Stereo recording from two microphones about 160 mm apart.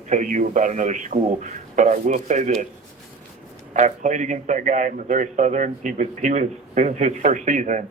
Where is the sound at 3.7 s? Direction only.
50° right (ahead or behind).